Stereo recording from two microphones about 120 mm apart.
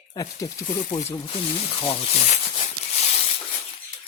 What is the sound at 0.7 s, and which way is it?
Speech, 90° left.